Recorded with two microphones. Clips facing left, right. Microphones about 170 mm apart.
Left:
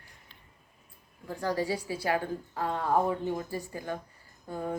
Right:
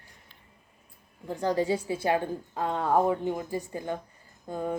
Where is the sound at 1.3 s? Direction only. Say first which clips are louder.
Right 4 dB; 20° right (ahead or behind).